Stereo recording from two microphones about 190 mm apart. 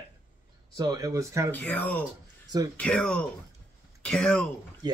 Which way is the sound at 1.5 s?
10° left (ahead or behind).